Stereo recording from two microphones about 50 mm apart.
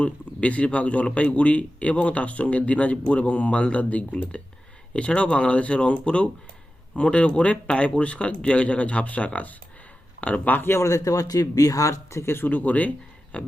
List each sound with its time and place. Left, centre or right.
0.0 s speech: left
10.7 s speech: left
12.3 s speech: left